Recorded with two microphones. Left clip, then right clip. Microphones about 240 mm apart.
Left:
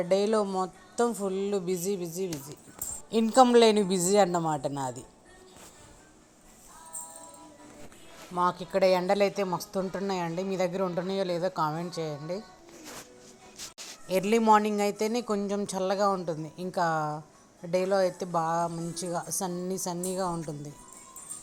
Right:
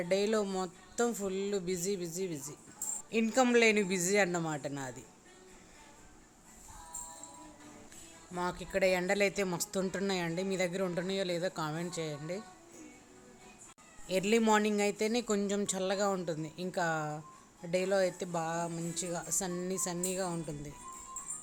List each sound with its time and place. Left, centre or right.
0.0 s speech: centre
0.4 s speech: centre
1.0 s speech: centre
1.6 s a man's voice: centre
3.2 s a man's voice: centre
8.4 s a man's voice: centre
9.6 s speech: centre
10.2 s speech: centre
11.5 s speech: centre
14.1 s speech: centre